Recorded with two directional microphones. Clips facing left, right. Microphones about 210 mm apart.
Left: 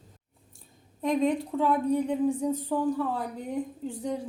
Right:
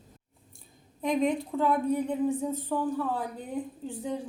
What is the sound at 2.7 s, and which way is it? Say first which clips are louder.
Speech: even; 10° left (ahead or behind).